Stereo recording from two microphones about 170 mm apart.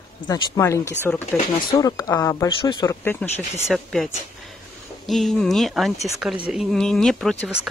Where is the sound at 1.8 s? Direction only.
20° left (ahead or behind).